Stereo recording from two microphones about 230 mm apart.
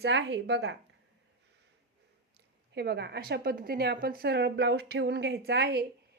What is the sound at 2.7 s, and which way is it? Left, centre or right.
A woman's voice, right.